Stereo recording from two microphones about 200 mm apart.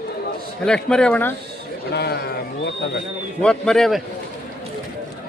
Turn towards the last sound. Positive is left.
turn(degrees=0)  # may be behind; listen again after turning